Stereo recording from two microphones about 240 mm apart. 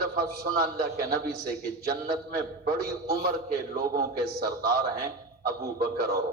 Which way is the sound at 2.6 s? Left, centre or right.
Right.